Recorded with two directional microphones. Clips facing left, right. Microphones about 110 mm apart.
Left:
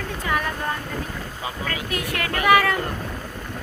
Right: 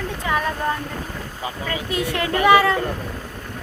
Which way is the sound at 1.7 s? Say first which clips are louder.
Right 6 dB; 25° right (ahead or behind).